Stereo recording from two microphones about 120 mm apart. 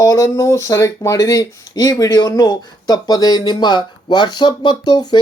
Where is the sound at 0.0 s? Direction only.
30° left (ahead or behind).